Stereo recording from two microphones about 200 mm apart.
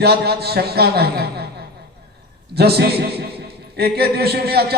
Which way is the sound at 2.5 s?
55° right (ahead or behind).